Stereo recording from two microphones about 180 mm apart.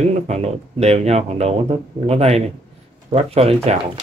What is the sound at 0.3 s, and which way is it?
Speech, 35° right (ahead or behind).